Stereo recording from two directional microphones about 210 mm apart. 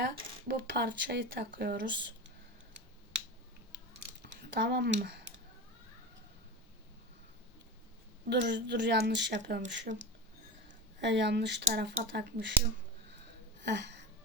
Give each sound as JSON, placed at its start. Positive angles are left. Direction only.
{"t": 0.0, "sound": "speech", "side_deg": -55}
{"t": 4.3, "sound": "speech", "side_deg": -55}
{"t": 8.3, "sound": "a woman's voice", "side_deg": -55}
{"t": 11.0, "sound": "a woman's voice", "side_deg": -55}
{"t": 13.6, "sound": "a sound", "side_deg": -55}